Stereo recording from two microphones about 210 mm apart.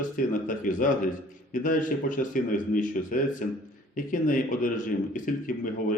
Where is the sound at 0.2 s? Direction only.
40° left (ahead or behind).